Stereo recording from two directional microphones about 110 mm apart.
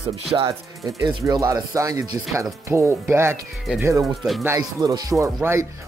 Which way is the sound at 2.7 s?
25° right (ahead or behind).